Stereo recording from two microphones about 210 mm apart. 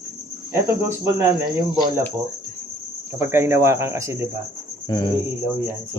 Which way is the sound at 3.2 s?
10° right (ahead or behind).